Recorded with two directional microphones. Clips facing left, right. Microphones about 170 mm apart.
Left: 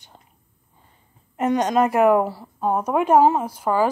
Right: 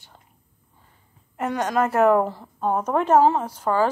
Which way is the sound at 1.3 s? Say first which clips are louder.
Left 4 dB; 20° left (ahead or behind).